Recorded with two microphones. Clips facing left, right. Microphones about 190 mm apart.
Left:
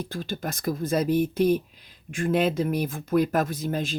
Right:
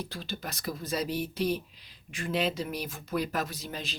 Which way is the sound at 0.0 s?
50° left (ahead or behind).